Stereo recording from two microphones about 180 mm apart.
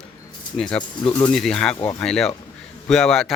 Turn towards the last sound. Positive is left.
turn(degrees=0)  # may be behind; listen again after turning